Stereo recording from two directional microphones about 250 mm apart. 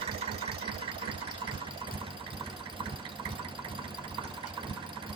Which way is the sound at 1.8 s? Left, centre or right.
Centre.